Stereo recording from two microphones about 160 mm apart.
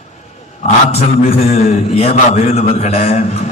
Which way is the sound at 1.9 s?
40° left (ahead or behind).